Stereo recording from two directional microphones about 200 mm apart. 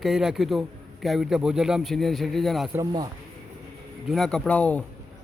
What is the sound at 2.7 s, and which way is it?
Speech, 15° right (ahead or behind).